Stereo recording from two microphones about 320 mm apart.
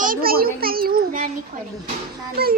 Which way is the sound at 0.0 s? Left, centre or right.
Right.